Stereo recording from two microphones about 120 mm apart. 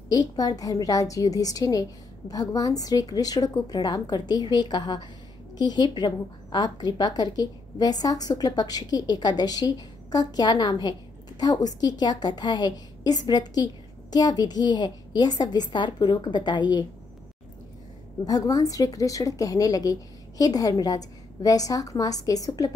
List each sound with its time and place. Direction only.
0.1 s a woman's voice: 35° left (ahead or behind)
18.2 s a woman's voice: 30° left (ahead or behind)